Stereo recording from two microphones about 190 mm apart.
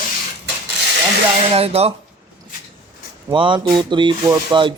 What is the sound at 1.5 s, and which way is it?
Speech, 30° right (ahead or behind).